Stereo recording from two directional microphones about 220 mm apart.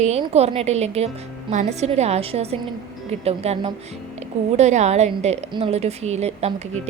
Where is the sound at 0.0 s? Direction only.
30° right (ahead or behind).